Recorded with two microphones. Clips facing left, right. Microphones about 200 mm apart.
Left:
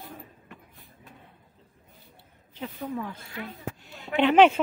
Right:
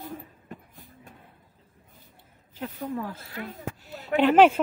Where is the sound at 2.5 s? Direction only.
5° right (ahead or behind).